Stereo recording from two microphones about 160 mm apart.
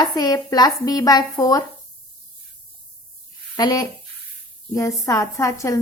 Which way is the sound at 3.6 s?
25° left (ahead or behind).